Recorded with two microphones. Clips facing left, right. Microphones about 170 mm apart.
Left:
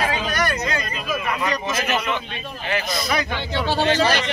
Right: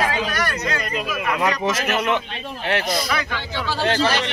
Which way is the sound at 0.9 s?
70° right (ahead or behind).